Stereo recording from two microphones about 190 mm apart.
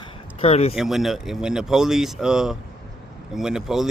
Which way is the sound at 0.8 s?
Centre (ahead or behind).